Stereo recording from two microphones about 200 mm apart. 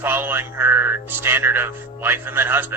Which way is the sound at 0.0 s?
10° right (ahead or behind).